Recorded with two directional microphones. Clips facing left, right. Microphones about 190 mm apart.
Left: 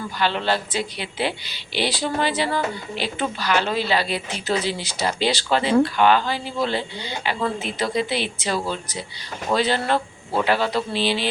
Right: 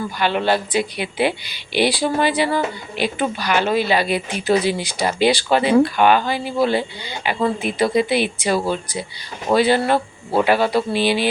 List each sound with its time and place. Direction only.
0.2 s speech: 15° right (ahead or behind)